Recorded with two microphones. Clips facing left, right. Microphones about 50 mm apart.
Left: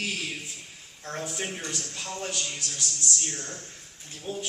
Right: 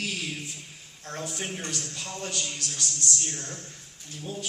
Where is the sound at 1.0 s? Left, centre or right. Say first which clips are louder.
Left 1 dB; left.